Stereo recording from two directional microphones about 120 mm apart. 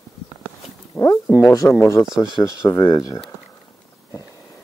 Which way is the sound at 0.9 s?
30° left (ahead or behind).